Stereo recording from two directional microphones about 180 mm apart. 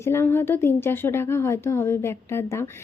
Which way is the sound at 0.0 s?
15° left (ahead or behind).